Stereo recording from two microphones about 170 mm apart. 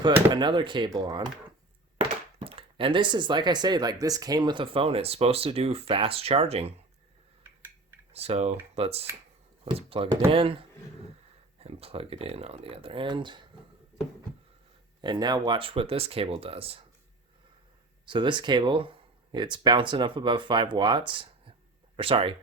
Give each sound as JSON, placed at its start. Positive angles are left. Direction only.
{"t": 0.0, "sound": "speech", "side_deg": -25}
{"t": 8.1, "sound": "speech", "side_deg": -35}
{"t": 15.0, "sound": "speech", "side_deg": -25}
{"t": 18.0, "sound": "speech", "side_deg": -30}